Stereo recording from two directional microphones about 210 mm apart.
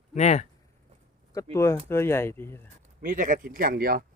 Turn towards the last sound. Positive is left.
turn(degrees=-45)  # may be behind; listen again after turning